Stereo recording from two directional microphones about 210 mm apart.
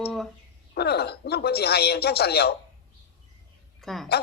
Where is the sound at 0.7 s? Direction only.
50° left (ahead or behind).